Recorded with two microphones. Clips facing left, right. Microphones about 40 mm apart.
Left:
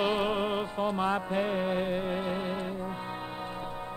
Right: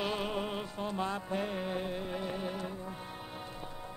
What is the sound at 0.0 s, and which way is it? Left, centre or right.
Music, left.